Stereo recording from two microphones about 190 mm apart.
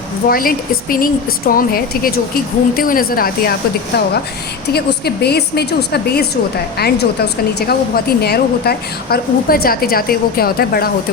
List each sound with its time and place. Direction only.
0.3 s a woman's voice: 50° left (ahead or behind)
4.7 s a woman's voice: 60° left (ahead or behind)